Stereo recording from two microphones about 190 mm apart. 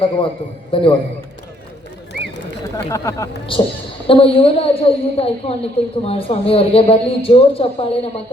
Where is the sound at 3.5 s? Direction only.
25° left (ahead or behind).